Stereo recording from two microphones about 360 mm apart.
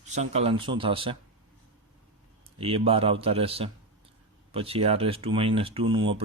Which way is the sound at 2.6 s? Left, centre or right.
Centre.